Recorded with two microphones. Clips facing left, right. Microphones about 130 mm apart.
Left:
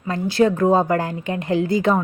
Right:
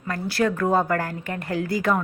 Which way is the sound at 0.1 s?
20° left (ahead or behind).